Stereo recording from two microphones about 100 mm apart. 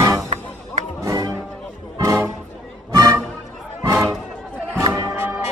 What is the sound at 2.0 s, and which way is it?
Music, 35° right (ahead or behind).